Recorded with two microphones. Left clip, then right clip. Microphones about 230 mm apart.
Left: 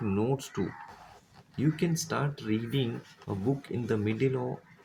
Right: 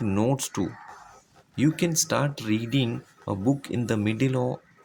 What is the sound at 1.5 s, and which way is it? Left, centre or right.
Speech, right.